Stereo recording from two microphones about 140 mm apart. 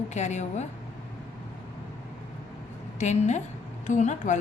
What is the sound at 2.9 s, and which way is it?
A woman's voice, 55° left (ahead or behind).